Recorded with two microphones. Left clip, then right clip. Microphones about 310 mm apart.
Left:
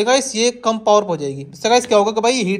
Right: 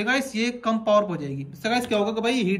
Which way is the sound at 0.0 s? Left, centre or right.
Centre.